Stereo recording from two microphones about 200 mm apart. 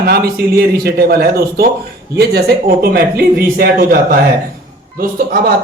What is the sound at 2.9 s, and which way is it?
Speech, 50° right (ahead or behind).